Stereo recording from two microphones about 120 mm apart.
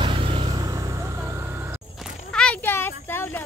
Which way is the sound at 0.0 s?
45° right (ahead or behind).